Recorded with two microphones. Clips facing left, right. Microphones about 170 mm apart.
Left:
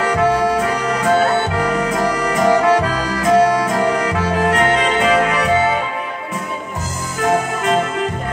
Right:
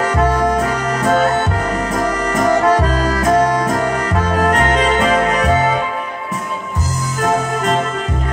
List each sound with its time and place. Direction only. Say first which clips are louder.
0.0 s music: even; 40° right (ahead or behind)